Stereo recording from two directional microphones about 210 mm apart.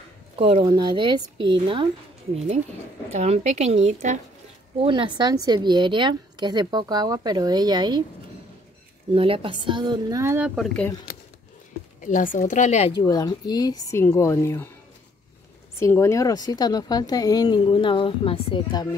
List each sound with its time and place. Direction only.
0.4 s a woman's voice: 25° right (ahead or behind)
9.1 s a woman's voice: 25° right (ahead or behind); by 10.9 s centre (ahead or behind)
12.0 s a woman's voice: 40° left (ahead or behind)
13.0 s speech: 20° left (ahead or behind)
15.8 s speech: 15° left (ahead or behind)